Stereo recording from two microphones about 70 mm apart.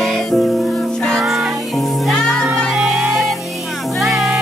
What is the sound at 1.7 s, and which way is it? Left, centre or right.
Music, centre.